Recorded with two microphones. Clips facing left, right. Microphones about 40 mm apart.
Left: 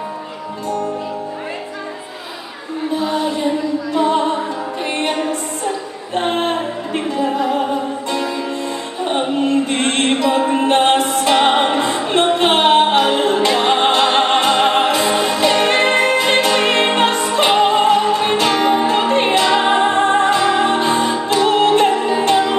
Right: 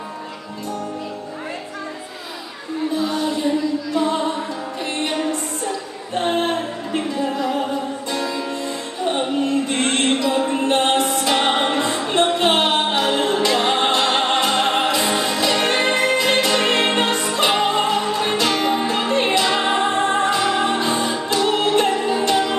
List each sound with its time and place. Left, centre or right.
3.0 s music: centre
5.7 s a sound: centre
9.0 s music: centre